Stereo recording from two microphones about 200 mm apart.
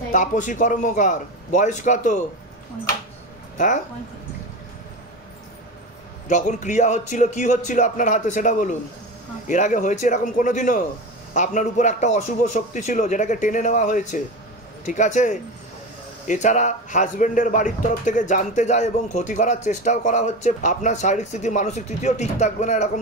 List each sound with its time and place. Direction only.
0.1 s a man's voice: 40° left (ahead or behind)
3.5 s speech: 40° left (ahead or behind)
6.2 s a man's voice: 40° left (ahead or behind)